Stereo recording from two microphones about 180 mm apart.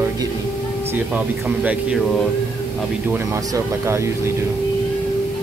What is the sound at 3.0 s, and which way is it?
Speech, 10° right (ahead or behind).